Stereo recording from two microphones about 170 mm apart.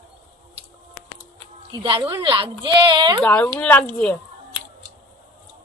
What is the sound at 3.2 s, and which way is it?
Speech, 10° left (ahead or behind).